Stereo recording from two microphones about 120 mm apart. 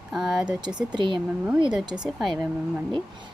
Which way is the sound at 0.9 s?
40° right (ahead or behind).